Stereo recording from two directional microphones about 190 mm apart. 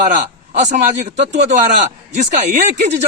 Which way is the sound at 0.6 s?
40° right (ahead or behind).